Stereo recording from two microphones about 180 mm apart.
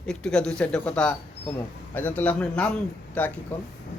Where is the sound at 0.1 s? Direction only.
5° left (ahead or behind).